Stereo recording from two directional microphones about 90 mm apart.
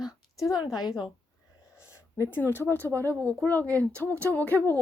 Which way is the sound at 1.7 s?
30° left (ahead or behind).